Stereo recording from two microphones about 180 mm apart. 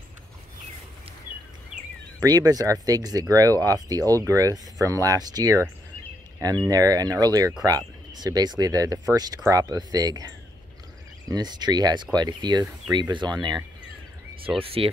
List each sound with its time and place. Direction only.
2.2 s speech: 20° right (ahead or behind)
6.7 s speech: 20° right (ahead or behind)